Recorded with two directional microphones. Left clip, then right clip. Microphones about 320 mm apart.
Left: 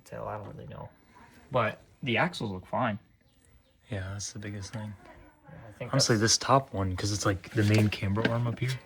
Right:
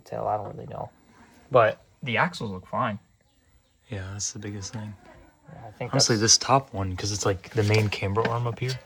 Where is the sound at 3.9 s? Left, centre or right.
Centre.